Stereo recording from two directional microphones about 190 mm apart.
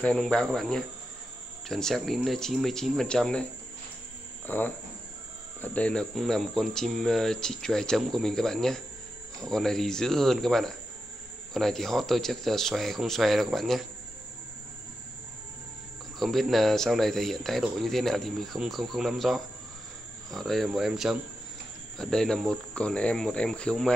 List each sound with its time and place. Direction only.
0.0 s speech: 5° left (ahead or behind)
4.5 s speech: 10° left (ahead or behind)
16.2 s speech: centre (ahead or behind)